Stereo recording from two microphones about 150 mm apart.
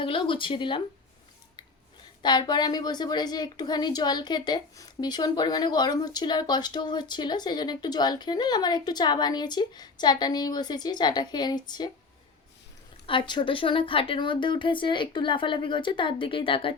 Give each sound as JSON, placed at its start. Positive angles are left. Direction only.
{"t": 0.0, "sound": "speech", "side_deg": 35}
{"t": 2.2, "sound": "a woman's voice", "side_deg": 30}
{"t": 13.1, "sound": "speech", "side_deg": 35}